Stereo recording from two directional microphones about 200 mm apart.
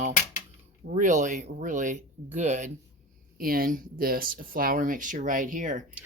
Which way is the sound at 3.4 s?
45° right (ahead or behind).